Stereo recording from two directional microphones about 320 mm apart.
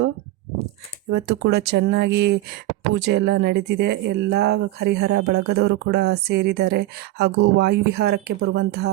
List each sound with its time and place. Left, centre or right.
1.1 s speech: right